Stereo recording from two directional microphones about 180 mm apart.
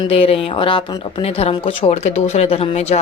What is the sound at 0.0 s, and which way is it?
Speech, 30° left (ahead or behind).